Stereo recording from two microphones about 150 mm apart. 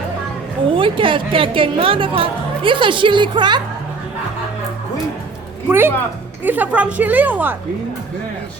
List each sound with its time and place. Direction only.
0.7 s a woman's voice: 35° right (ahead or behind)
5.6 s a woman's voice: 15° right (ahead or behind)